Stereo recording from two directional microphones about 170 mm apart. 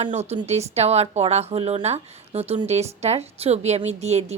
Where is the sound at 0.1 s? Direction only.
40° right (ahead or behind).